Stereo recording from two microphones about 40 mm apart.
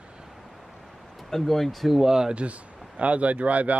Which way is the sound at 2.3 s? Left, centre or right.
Right.